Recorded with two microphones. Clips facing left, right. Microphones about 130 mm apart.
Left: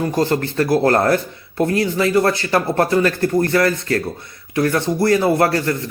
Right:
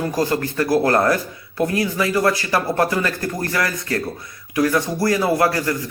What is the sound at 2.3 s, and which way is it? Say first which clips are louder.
Speech: left 2 dB; 25° left (ahead or behind).